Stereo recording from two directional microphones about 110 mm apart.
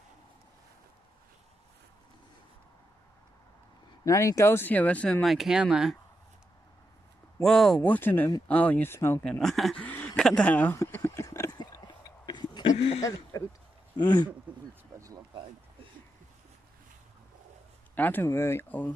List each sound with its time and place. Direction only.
4.0 s speech: 30° left (ahead or behind); by 5.2 s 15° left (ahead or behind)
5.2 s speech: centre (ahead or behind)
7.4 s speech: 5° left (ahead or behind)
7.9 s speech: 20° left (ahead or behind)
9.4 s speech: 5° left (ahead or behind)
9.8 s speech: 15° left (ahead or behind)
10.9 s pig: 20° left (ahead or behind)
11.5 s a sound: 40° left (ahead or behind)
12.7 s speech: 70° left (ahead or behind)
13.0 s speech: 30° left (ahead or behind)
14.5 s speech: 10° right (ahead or behind)
17.9 s speech: 15° left (ahead or behind)